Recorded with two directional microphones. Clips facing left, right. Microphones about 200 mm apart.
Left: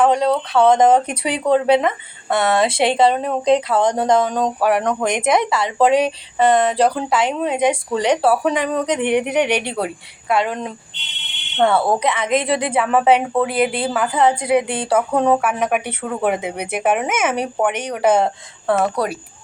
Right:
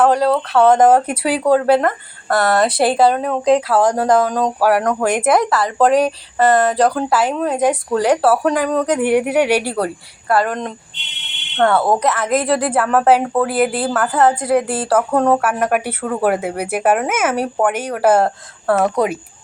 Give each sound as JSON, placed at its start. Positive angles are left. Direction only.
{"t": 0.1, "sound": "speech", "side_deg": -5}
{"t": 19.0, "sound": "a woman's voice", "side_deg": -20}